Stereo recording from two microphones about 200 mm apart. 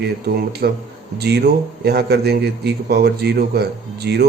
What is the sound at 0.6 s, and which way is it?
A man's voice, 55° right (ahead or behind).